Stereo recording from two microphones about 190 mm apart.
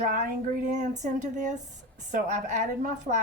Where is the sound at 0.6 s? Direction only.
40° right (ahead or behind).